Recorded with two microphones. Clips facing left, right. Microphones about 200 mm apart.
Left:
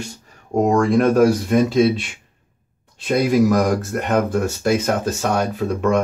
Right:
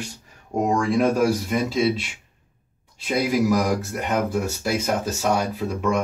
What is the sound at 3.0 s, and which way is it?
Speech, 55° left (ahead or behind).